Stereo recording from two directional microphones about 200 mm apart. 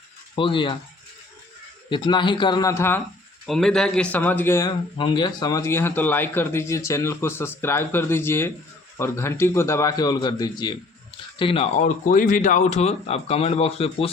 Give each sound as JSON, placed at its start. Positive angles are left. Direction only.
{"t": 0.3, "sound": "a man's voice", "side_deg": 25}
{"t": 1.9, "sound": "a man's voice", "side_deg": 25}
{"t": 3.4, "sound": "a man's voice", "side_deg": 0}